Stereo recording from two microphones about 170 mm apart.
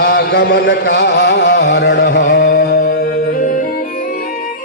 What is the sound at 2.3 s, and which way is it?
Music, 70° left (ahead or behind).